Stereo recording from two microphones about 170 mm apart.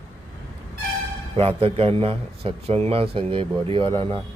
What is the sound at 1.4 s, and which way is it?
A man's voice, 35° right (ahead or behind).